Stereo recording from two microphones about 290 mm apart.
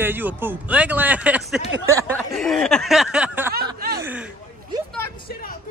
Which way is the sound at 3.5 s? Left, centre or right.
Right.